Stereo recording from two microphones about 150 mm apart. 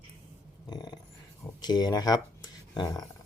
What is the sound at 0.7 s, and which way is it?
Dog, 25° left (ahead or behind).